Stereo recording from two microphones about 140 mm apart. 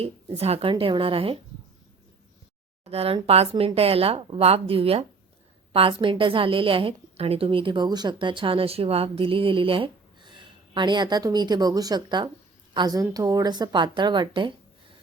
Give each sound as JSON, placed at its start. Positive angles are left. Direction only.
{"t": 0.0, "sound": "a woman's voice", "side_deg": -45}
{"t": 2.8, "sound": "speech", "side_deg": -45}
{"t": 3.5, "sound": "a woman's voice", "side_deg": -30}
{"t": 3.8, "sound": "a woman's voice", "side_deg": -45}